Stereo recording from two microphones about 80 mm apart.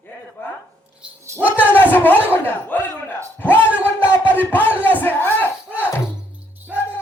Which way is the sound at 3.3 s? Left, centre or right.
Left.